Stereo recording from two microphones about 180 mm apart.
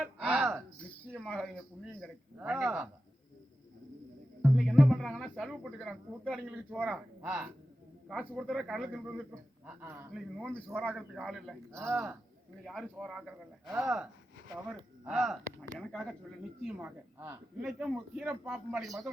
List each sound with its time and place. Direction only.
0.2 s a sound: 10° right (ahead or behind)
1.1 s speech: centre (ahead or behind)
2.5 s speech: 15° right (ahead or behind)
4.4 s speech: centre (ahead or behind)
10.2 s speech: centre (ahead or behind)
11.7 s speech: 10° right (ahead or behind)
12.6 s speech: centre (ahead or behind)